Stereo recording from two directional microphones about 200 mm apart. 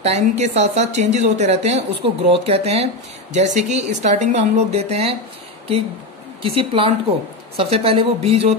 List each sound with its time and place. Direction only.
0.0 s speech: 35° right (ahead or behind)
6.4 s a woman's voice: 30° right (ahead or behind)